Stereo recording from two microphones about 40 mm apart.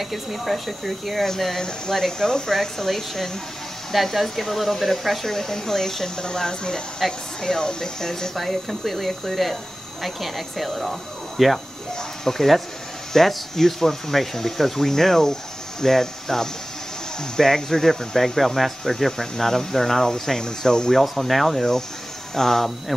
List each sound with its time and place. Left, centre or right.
0.0 s speech: centre
8.4 s speech: centre
20.9 s speech: centre